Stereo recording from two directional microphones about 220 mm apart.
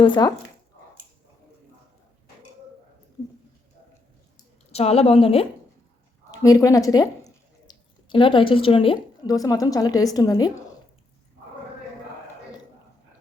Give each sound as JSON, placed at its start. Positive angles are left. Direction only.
{"t": 0.0, "sound": "a woman's voice", "side_deg": 20}
{"t": 4.7, "sound": "a woman's voice", "side_deg": 30}
{"t": 6.3, "sound": "a woman's voice", "side_deg": 15}